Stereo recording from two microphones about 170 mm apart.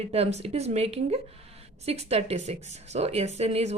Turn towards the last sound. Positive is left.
turn(degrees=-35)  # may be behind; listen again after turning